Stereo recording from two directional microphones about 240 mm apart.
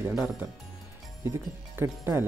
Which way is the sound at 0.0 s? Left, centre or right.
Centre.